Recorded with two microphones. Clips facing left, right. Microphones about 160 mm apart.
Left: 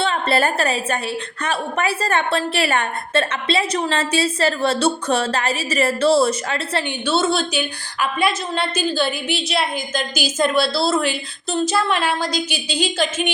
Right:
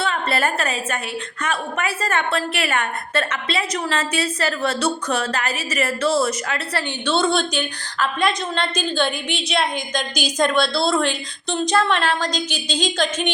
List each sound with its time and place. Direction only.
0.0 s a woman's voice: 30° left (ahead or behind)
7.1 s a woman's voice: 5° left (ahead or behind)